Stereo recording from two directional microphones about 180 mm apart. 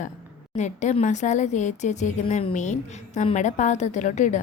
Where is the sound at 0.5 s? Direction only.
40° left (ahead or behind).